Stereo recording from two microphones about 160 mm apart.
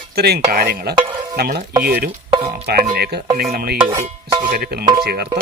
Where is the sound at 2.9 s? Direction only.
85° right.